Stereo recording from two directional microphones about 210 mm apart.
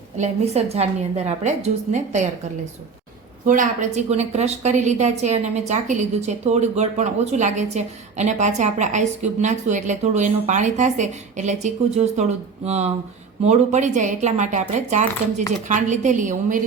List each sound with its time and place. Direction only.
0.2 s a woman's voice: 30° right (ahead or behind)
3.4 s a woman's voice: 40° right (ahead or behind)